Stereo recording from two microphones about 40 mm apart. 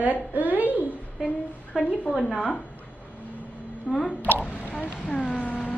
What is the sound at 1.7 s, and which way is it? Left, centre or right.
Speech, centre.